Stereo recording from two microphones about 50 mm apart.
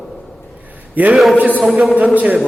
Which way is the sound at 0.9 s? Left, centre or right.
Right.